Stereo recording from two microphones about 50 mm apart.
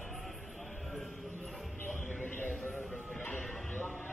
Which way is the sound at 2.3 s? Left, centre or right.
Left.